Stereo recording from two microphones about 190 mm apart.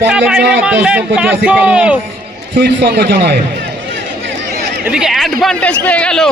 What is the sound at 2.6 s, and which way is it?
Speech, 60° right (ahead or behind).